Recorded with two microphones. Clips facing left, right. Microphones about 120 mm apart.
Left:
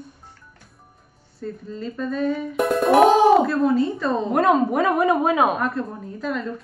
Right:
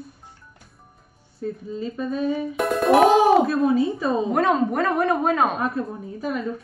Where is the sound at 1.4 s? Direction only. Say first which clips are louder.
Right 2 dB; 10° right (ahead or behind).